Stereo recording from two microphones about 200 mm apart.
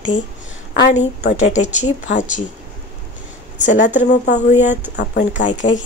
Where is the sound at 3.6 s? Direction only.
35° left (ahead or behind).